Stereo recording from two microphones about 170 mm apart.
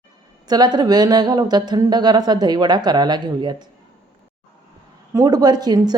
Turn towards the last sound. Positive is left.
turn(degrees=-25)  # may be behind; listen again after turning